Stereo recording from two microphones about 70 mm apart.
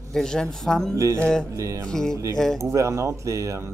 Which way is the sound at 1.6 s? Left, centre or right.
Right.